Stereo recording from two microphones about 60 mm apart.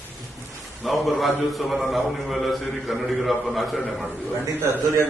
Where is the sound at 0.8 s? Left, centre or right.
Centre.